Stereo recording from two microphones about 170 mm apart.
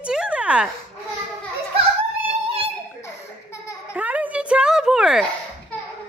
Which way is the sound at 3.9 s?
10° right (ahead or behind).